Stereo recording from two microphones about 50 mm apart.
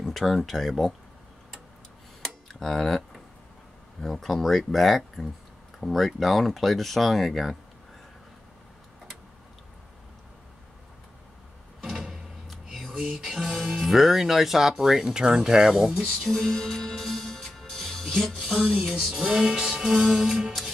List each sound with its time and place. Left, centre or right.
0.0 s speech: centre
2.2 s tick-tock: centre
4.0 s speech: centre
11.8 s drawer open or close: centre
13.0 s music: centre
13.7 s speech: centre
16.1 s music: centre
18.6 s music: right
18.9 s speech: centre